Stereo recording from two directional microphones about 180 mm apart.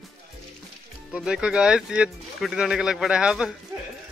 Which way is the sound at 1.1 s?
5° right (ahead or behind).